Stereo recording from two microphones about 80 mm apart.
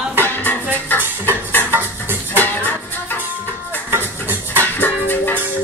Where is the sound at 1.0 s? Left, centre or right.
Right.